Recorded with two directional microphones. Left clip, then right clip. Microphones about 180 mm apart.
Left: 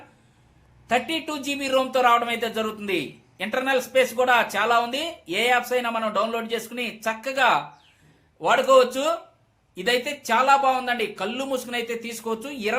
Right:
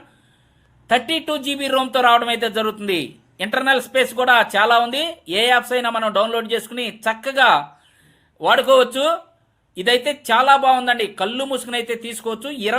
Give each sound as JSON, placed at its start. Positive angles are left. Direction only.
{"t": 0.9, "sound": "a man's voice", "side_deg": -40}